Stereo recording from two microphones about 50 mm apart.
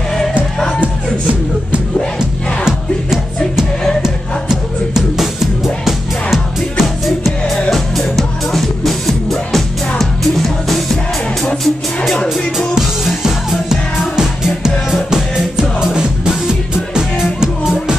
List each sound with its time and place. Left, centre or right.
2.1 s music: centre